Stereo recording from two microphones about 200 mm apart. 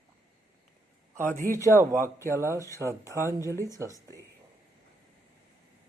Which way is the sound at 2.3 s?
15° right (ahead or behind).